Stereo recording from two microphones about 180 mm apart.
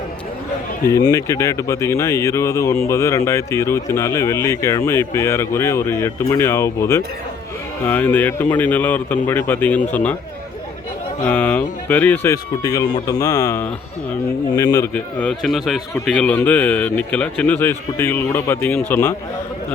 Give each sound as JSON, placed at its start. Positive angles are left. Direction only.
{"t": 0.9, "sound": "speech", "side_deg": 15}
{"t": 11.2, "sound": "a man's voice", "side_deg": 10}